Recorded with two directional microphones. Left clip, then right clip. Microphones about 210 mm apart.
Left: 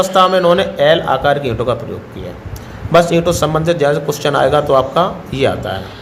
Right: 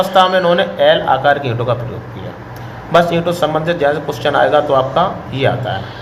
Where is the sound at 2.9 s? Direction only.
50° left (ahead or behind).